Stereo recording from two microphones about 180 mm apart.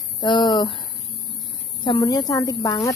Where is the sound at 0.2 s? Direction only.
25° left (ahead or behind).